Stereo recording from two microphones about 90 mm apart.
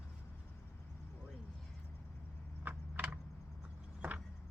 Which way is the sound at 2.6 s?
15° right (ahead or behind).